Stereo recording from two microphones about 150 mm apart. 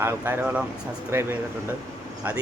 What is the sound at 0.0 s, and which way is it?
Speech, 15° right (ahead or behind).